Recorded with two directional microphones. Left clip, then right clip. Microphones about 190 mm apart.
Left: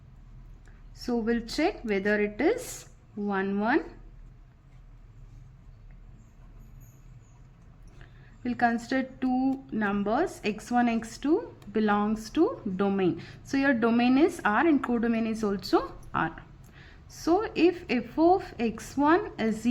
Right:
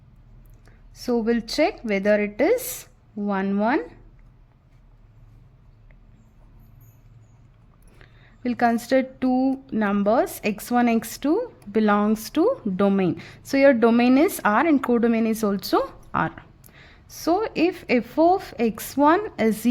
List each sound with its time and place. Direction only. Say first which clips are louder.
0.9 s speech: right 6 dB; 40° right (ahead or behind)
8.4 s speech: right 6 dB; 45° right (ahead or behind)